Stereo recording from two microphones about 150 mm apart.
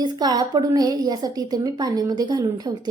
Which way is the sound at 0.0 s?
25° right (ahead or behind).